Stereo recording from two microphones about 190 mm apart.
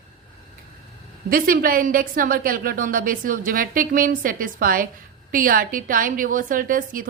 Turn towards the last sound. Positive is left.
turn(degrees=-45)  # may be behind; listen again after turning